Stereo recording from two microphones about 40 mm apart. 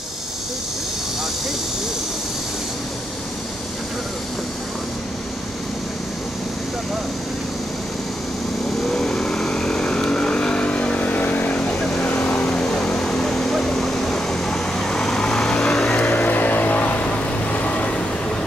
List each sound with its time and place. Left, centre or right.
8.9 s vehicle: centre; by 11.5 s left
12.2 s vehicle: left
15.9 s vehicle: left